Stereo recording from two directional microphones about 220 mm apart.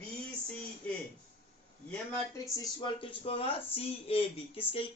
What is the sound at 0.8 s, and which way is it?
Speech, 5° left (ahead or behind).